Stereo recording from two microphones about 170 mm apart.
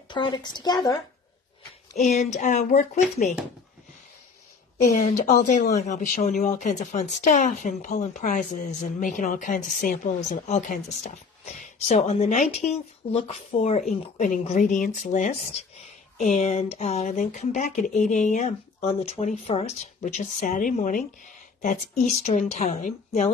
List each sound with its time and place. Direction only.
0.1 s a woman's voice: 25° left (ahead or behind)
2.0 s speech: 40° left (ahead or behind)
4.8 s speech: 45° left (ahead or behind)
22.0 s speech: 45° left (ahead or behind)